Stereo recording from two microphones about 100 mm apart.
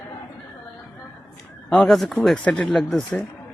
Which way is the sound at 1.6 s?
5° left (ahead or behind).